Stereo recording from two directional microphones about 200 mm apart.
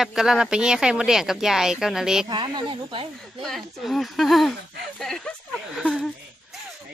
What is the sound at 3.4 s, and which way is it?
A woman's voice, centre (ahead or behind).